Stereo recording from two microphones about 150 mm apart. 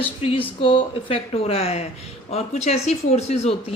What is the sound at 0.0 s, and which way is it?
Speech, 35° left (ahead or behind).